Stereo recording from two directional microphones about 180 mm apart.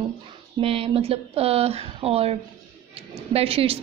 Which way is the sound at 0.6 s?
30° right (ahead or behind).